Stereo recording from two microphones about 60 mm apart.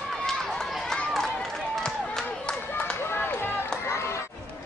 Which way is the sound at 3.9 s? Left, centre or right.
Left.